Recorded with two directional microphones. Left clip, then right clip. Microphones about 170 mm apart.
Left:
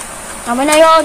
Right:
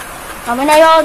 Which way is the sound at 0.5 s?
25° left (ahead or behind).